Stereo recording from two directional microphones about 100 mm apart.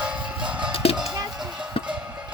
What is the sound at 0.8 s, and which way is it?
Music, 80° left.